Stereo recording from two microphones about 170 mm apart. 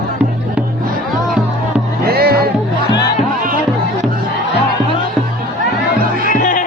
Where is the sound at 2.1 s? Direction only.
65° right (ahead or behind).